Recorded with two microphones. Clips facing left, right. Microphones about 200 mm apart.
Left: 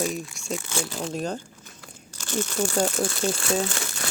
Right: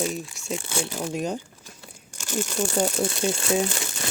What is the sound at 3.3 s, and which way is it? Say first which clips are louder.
Speech: right 3 dB; 15° right (ahead or behind).